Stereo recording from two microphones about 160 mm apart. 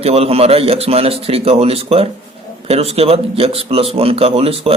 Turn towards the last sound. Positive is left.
turn(degrees=-35)  # may be behind; listen again after turning